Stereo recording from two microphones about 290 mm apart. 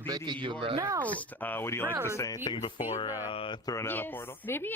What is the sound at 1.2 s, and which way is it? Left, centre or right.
A woman's voice, centre.